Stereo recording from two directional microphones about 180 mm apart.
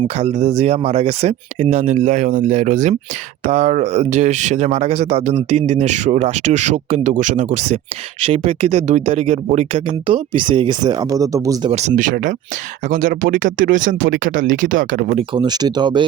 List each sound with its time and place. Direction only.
0.2 s speech: 35° right (ahead or behind); by 11.7 s 20° right (ahead or behind)
11.7 s speech: 40° right (ahead or behind)
15.3 s speech: 25° right (ahead or behind)